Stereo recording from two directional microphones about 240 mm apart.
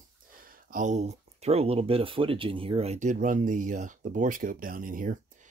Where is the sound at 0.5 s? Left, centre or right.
Right.